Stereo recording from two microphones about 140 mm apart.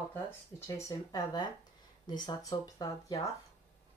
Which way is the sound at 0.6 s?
25° left (ahead or behind).